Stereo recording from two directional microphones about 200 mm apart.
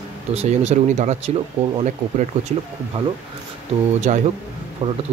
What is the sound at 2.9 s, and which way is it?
Speech, 30° right (ahead or behind).